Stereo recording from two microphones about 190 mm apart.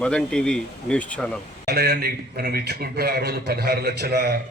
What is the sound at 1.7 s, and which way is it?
A man's voice, 55° right (ahead or behind).